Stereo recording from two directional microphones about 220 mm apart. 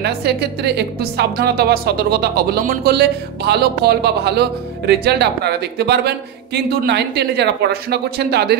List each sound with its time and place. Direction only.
0.0 s speech: 50° right (ahead or behind)